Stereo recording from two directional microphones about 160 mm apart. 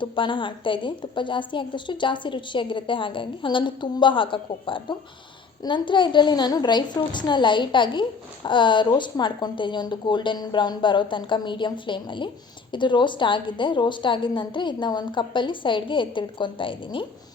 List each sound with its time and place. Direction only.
0.0 s a woman's voice: 30° left (ahead or behind)